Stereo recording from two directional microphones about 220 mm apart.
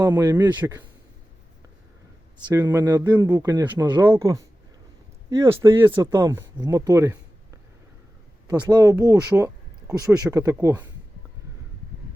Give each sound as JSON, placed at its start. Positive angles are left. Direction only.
{"t": 0.0, "sound": "speech", "side_deg": -15}
{"t": 2.6, "sound": "speech", "side_deg": -15}
{"t": 8.4, "sound": "speech", "side_deg": -15}